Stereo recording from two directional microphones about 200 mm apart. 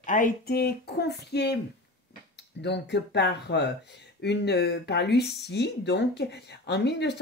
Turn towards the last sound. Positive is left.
turn(degrees=55)  # may be behind; listen again after turning